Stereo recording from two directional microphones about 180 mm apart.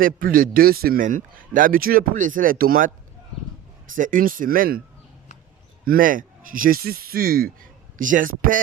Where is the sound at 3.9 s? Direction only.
50° right (ahead or behind).